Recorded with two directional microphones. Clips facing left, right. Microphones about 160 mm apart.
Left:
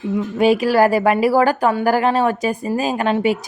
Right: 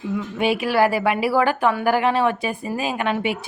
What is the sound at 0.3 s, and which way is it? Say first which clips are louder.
A woman's voice: left 5 dB; 40° left (ahead or behind).